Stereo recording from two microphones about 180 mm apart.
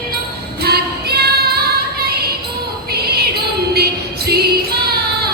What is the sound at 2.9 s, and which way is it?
Music, 60° right (ahead or behind).